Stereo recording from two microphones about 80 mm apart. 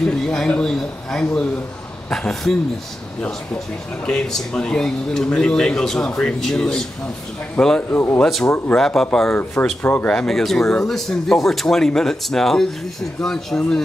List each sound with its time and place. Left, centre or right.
0.0 s speech: centre
4.0 s speech: centre
7.9 s speech: left
8.7 s a man's voice: centre
9.3 s speech: left
10.0 s a man's voice: centre